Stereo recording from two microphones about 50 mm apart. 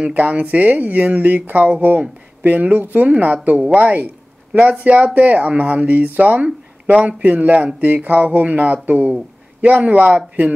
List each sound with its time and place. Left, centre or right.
0.1 s speech: right